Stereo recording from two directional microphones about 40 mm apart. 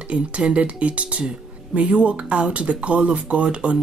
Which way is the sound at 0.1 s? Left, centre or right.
Right.